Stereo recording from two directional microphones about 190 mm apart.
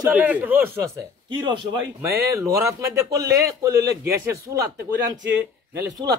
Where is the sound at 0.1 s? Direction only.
10° right (ahead or behind).